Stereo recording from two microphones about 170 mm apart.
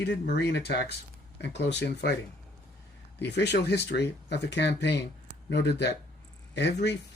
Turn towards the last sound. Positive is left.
turn(degrees=90)